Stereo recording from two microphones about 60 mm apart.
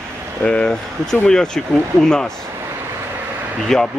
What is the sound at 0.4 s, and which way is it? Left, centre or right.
Speech, centre.